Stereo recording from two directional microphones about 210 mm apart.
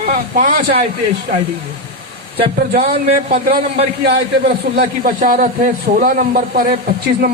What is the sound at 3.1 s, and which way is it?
A man's voice, 35° right (ahead or behind).